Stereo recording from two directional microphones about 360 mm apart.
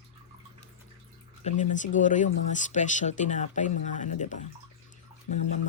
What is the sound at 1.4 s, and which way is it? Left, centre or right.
Speech, left.